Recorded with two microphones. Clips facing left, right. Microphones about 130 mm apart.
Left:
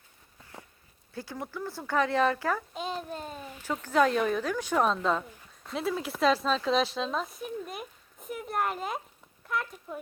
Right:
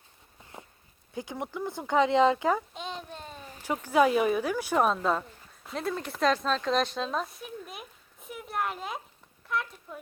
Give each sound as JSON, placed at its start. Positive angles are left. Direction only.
{"t": 1.1, "sound": "speech", "side_deg": -15}
{"t": 2.7, "sound": "a child's voice", "side_deg": 5}
{"t": 3.6, "sound": "speech", "side_deg": -10}